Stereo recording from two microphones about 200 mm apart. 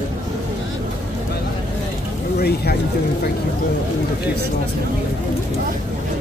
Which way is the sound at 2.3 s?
50° left (ahead or behind).